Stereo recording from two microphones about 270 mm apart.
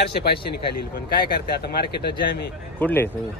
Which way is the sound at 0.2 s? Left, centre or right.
Left.